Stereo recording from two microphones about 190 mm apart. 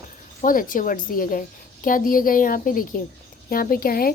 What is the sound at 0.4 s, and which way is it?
A woman's voice, 45° left (ahead or behind).